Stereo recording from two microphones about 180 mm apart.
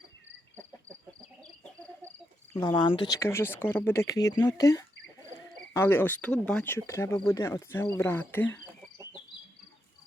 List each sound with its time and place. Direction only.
2.6 s speech: 25° left (ahead or behind)
3.2 s speech: 15° left (ahead or behind)